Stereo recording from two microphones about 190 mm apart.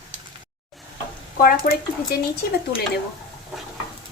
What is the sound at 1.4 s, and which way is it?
Speech, 50° left (ahead or behind).